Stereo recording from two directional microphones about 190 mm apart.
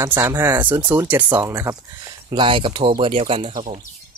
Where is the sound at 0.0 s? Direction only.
15° right (ahead or behind).